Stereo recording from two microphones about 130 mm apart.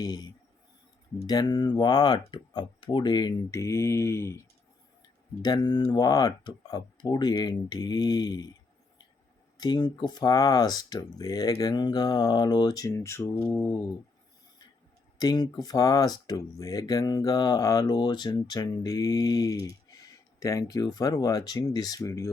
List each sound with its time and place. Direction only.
0.0 s speech: 30° left (ahead or behind)
1.3 s speech: 35° left (ahead or behind)
3.6 s speech: 20° left (ahead or behind)
5.4 s speech: 30° left (ahead or behind)
9.6 s speech: 35° left (ahead or behind)
15.2 s speech: 30° left (ahead or behind)